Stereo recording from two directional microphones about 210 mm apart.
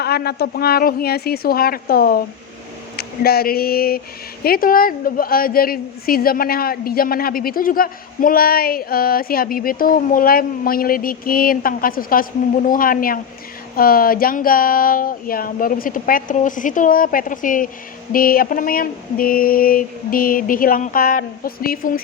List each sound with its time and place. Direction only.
0.0 s a woman's voice: 50° left (ahead or behind)